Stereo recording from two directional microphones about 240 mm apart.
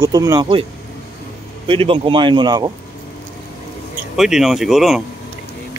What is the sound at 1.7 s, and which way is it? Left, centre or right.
Speech, right.